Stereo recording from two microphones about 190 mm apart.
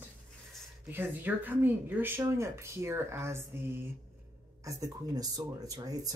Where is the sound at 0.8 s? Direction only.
10° right (ahead or behind).